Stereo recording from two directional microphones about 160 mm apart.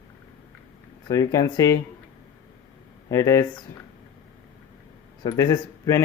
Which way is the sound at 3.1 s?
20° left (ahead or behind).